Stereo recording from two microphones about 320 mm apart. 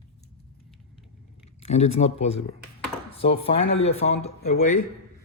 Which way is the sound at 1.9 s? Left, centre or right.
Centre.